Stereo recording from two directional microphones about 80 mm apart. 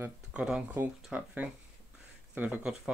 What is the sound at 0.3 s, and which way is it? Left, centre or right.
Speech, centre.